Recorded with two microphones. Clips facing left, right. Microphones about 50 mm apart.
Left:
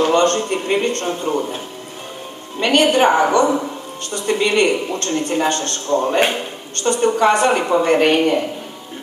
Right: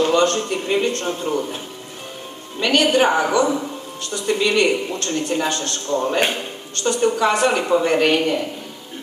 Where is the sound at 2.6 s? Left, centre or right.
Left.